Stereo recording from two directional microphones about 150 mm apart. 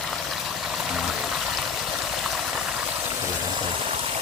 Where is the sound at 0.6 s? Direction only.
5° right (ahead or behind).